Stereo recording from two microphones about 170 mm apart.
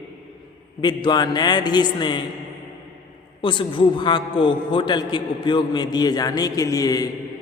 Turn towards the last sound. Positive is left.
turn(degrees=20)  # may be behind; listen again after turning